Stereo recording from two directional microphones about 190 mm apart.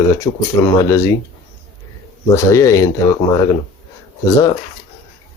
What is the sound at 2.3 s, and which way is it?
Speech, 15° left (ahead or behind).